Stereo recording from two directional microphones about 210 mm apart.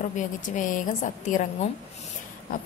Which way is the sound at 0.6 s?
40° left (ahead or behind).